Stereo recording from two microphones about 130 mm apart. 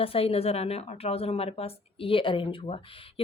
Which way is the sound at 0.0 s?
50° left (ahead or behind).